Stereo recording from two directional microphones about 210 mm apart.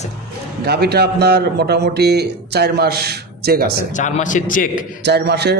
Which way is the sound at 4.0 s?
35° left (ahead or behind).